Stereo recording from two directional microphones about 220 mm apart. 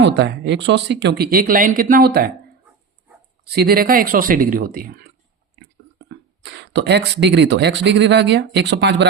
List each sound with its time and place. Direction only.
0.0 s speech: 50° right (ahead or behind)
3.4 s speech: 45° right (ahead or behind)
6.1 s speech: 50° right (ahead or behind)